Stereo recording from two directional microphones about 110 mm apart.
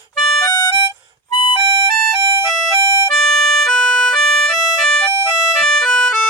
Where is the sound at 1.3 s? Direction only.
45° left (ahead or behind).